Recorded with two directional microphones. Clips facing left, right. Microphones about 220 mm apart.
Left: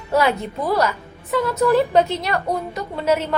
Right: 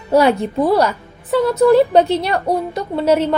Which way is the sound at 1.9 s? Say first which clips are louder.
Right 4 dB; 30° right (ahead or behind).